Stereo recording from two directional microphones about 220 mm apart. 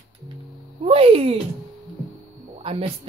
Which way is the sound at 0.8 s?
25° right (ahead or behind).